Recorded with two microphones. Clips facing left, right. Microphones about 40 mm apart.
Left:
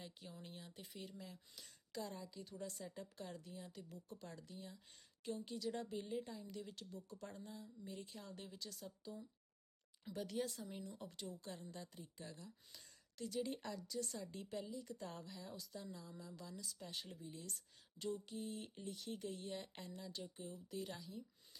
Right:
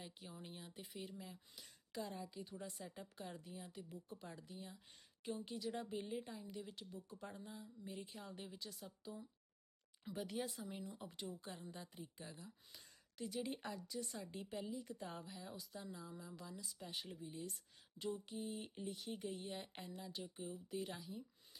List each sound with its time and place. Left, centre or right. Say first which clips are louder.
0.0 s a woman's voice: right 1 dB; centre